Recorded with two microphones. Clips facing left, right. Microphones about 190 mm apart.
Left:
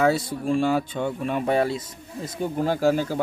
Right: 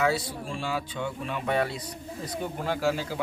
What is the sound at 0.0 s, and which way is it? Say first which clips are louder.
Speech: left 5 dB; 50° left (ahead or behind).